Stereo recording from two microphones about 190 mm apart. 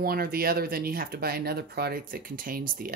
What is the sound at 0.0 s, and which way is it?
Speech, 50° right (ahead or behind).